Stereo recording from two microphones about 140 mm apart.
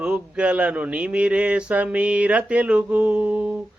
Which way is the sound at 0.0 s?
10° right (ahead or behind).